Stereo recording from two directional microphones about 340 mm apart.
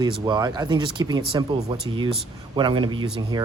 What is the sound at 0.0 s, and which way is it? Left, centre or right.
Speech, centre.